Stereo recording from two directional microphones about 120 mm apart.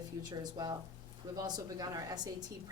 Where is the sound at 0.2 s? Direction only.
35° right (ahead or behind).